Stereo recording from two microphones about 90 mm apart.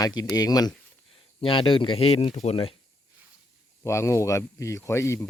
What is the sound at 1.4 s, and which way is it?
Speech, 75° left (ahead or behind).